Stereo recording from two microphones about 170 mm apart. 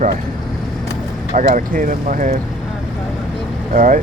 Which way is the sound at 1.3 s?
50° right (ahead or behind).